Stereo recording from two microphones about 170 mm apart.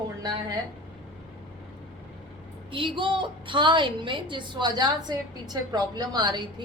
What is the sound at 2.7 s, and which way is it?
A woman's voice, 30° right (ahead or behind).